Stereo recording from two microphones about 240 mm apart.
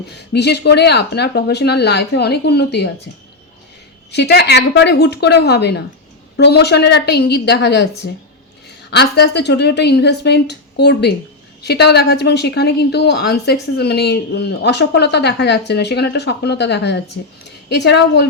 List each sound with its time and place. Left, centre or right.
0.3 s a woman's voice: left
4.1 s a woman's voice: left